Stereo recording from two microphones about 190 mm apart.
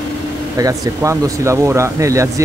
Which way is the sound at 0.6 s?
15° right (ahead or behind).